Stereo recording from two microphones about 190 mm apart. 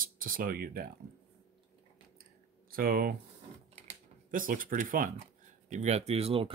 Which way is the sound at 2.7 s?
50° right (ahead or behind).